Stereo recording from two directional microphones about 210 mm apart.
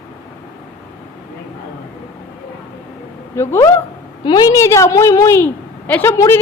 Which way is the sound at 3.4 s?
10° left (ahead or behind).